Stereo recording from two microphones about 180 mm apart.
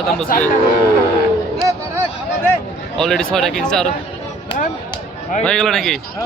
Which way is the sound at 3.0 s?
5° left (ahead or behind).